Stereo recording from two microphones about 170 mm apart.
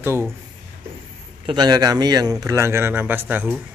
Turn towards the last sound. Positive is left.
turn(degrees=-10)  # may be behind; listen again after turning